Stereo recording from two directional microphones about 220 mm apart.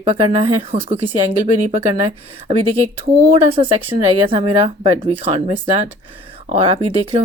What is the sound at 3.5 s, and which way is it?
Speech, 25° right (ahead or behind).